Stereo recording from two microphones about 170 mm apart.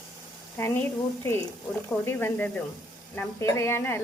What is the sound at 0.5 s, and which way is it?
Speech, 15° left (ahead or behind).